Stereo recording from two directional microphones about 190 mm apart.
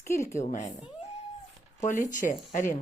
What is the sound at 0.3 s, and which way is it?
Speech, 40° left (ahead or behind).